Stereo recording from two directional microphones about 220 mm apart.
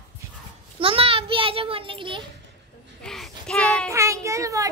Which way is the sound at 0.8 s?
25° right (ahead or behind).